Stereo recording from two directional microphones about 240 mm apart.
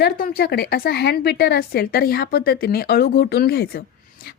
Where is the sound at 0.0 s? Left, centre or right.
Left.